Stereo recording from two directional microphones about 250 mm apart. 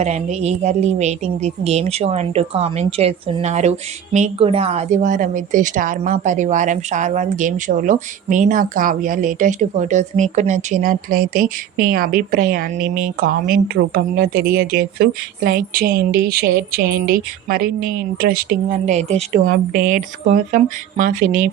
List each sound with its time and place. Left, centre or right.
0.0 s a woman's voice: right